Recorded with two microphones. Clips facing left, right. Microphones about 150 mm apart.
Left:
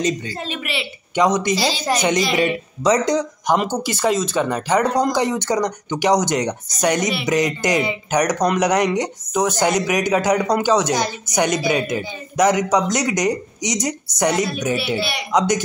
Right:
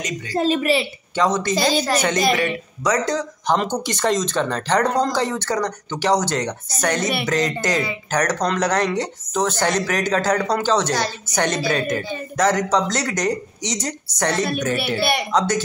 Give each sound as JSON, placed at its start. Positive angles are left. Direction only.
{"t": 0.3, "sound": "a woman's voice", "side_deg": -35}
{"t": 1.1, "sound": "speech", "side_deg": 15}
{"t": 1.5, "sound": "a woman's voice", "side_deg": -50}
{"t": 1.9, "sound": "speech", "side_deg": 15}
{"t": 15.0, "sound": "a woman's voice", "side_deg": -50}
{"t": 15.3, "sound": "speech", "side_deg": 15}